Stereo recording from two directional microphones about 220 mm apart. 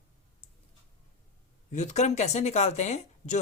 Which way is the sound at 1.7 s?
30° left (ahead or behind).